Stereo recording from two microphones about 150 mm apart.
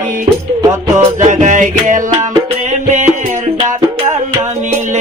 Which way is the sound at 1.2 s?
55° right (ahead or behind).